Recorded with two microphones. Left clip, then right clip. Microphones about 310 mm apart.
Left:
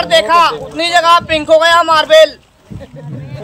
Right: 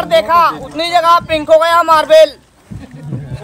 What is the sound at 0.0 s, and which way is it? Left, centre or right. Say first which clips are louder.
Speech: left 1 dB; right.